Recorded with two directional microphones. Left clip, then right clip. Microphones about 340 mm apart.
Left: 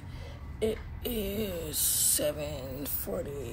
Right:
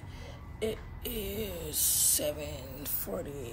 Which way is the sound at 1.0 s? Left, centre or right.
Centre.